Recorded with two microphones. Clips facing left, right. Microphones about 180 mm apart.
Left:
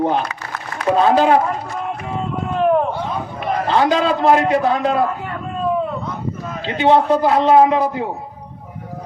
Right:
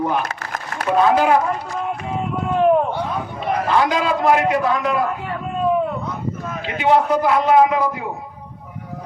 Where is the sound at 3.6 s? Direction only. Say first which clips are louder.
Left 3 dB; 25° left (ahead or behind).